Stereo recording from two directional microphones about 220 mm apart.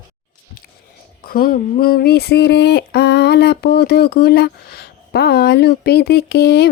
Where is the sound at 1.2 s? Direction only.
40° left (ahead or behind).